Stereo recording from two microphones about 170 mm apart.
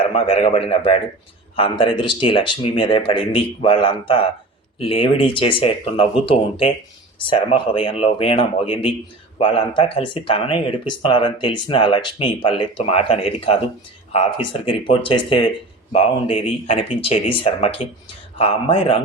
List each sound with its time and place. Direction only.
0.1 s speech: 40° left (ahead or behind)